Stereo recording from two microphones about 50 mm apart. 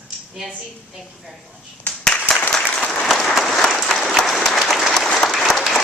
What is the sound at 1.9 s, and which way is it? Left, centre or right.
Clapping, left.